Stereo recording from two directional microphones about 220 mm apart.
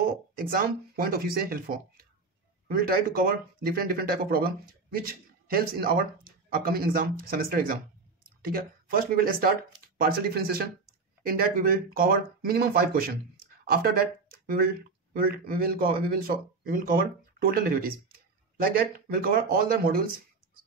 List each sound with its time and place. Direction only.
0.0 s speech: 40° right (ahead or behind)
2.7 s speech: 40° right (ahead or behind)